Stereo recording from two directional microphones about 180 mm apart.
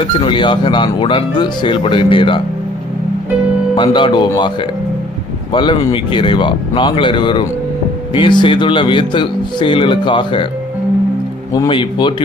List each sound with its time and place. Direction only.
0.0 s speech: 30° left (ahead or behind)
3.8 s speech: 25° left (ahead or behind)
11.5 s speech: 25° left (ahead or behind)